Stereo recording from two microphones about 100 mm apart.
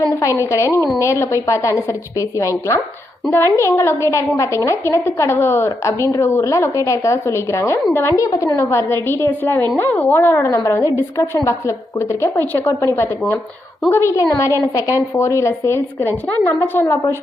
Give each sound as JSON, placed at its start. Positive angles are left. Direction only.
{"t": 0.1, "sound": "a woman's voice", "side_deg": 30}